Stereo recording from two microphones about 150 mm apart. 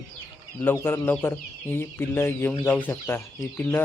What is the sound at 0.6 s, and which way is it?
Speech, 15° left (ahead or behind).